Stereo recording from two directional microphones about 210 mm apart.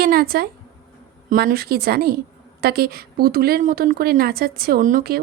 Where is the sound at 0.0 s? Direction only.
45° right (ahead or behind).